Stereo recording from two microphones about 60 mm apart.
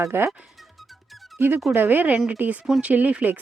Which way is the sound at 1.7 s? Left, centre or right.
Right.